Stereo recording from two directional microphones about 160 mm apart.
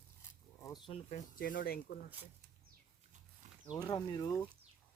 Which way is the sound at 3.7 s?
25° left (ahead or behind).